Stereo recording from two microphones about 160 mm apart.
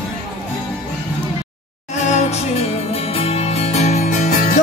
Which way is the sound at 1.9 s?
45° left (ahead or behind).